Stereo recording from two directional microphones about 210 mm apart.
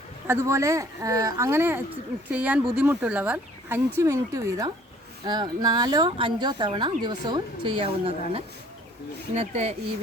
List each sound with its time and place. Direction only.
0.3 s speech: 15° right (ahead or behind); by 9.7 s 30° right (ahead or behind)